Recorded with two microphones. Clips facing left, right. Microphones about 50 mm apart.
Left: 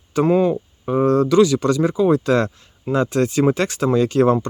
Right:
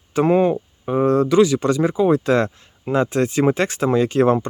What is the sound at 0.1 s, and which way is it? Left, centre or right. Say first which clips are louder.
Speech: even; right.